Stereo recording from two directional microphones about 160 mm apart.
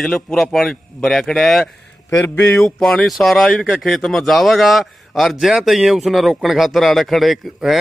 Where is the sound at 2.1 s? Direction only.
15° left (ahead or behind).